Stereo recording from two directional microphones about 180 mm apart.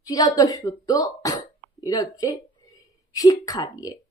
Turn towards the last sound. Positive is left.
turn(degrees=20)  # may be behind; listen again after turning